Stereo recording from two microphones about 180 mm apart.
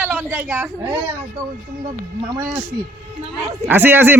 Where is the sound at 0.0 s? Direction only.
5° right (ahead or behind).